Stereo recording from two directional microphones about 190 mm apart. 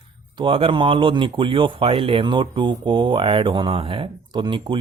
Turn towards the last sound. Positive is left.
turn(degrees=-25)  # may be behind; listen again after turning